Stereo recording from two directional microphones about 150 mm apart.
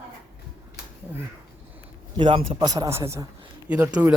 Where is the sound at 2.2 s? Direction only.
35° right (ahead or behind); by 3.3 s 20° right (ahead or behind).